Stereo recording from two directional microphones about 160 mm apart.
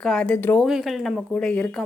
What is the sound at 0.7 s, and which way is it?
A woman's voice, centre (ahead or behind).